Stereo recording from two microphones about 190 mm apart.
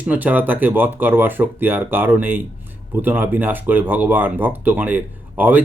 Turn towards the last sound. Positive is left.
turn(degrees=-10)  # may be behind; listen again after turning